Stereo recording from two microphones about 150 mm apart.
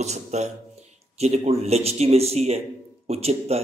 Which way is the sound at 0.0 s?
50° right (ahead or behind).